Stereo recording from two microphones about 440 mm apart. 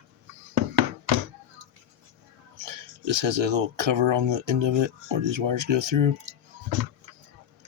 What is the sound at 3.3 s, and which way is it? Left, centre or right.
Speech, right.